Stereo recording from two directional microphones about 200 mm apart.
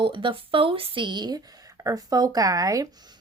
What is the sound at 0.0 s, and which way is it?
Speech, 25° right (ahead or behind).